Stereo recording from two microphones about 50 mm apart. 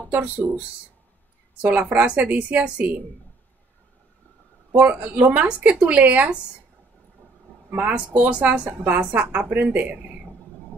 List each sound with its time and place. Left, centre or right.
1.6 s a woman's voice: right
4.7 s speech: right
7.7 s a woman's voice: right
8.6 s a woman's voice: right